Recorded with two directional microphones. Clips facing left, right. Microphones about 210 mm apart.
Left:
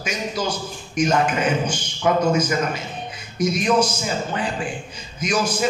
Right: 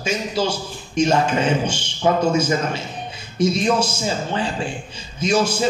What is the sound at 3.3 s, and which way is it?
A man's voice, 30° right (ahead or behind).